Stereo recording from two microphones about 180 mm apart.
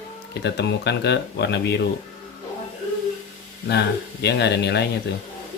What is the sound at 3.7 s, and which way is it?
Speech, 70° left (ahead or behind).